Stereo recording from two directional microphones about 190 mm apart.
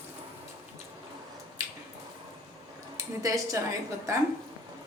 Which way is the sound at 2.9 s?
15° right (ahead or behind).